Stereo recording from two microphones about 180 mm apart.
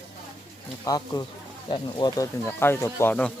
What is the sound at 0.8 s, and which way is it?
Speech, 20° left (ahead or behind).